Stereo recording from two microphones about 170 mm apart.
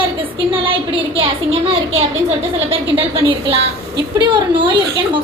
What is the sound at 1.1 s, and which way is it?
A woman's voice, 35° right (ahead or behind).